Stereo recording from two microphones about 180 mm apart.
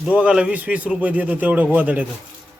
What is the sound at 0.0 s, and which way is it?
A man's voice, 5° right (ahead or behind).